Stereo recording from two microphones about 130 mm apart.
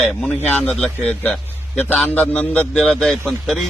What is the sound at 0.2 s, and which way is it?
A man's voice, 10° left (ahead or behind).